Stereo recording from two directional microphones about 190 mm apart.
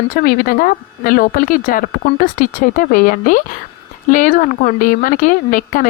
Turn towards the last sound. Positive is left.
turn(degrees=45)  # may be behind; listen again after turning